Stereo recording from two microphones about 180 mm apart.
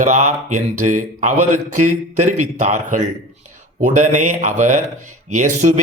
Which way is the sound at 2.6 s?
45° right (ahead or behind).